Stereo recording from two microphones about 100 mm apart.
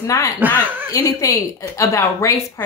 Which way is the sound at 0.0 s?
30° left (ahead or behind).